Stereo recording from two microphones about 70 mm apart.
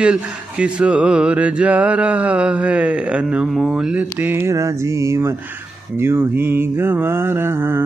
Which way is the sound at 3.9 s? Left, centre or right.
Right.